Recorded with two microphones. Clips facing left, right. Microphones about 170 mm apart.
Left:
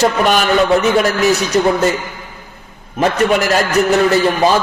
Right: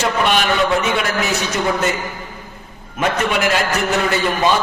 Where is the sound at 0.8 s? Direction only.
40° left (ahead or behind).